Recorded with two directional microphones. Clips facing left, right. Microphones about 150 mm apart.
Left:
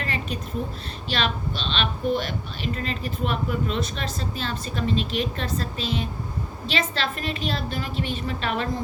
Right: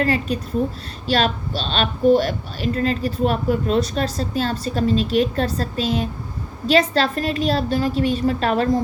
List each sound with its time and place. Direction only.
0.0 s a woman's voice: 40° right (ahead or behind)